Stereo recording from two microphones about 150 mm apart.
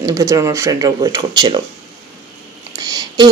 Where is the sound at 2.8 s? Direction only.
25° right (ahead or behind).